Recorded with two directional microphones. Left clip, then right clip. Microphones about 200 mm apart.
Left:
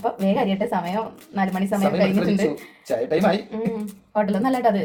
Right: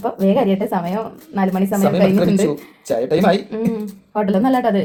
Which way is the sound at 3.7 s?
40° right (ahead or behind).